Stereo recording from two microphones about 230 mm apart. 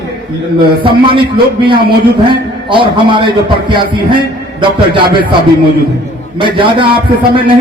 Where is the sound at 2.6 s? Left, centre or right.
Right.